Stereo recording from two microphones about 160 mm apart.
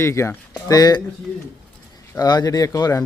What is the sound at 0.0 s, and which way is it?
Speech, 15° left (ahead or behind).